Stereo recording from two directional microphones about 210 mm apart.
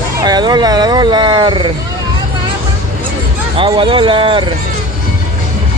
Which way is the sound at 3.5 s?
25° right (ahead or behind).